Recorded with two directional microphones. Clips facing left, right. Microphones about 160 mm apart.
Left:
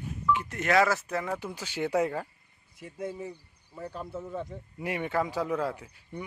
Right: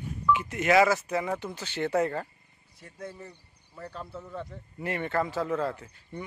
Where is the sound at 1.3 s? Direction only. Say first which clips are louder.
Right 1 dB; 10° left (ahead or behind).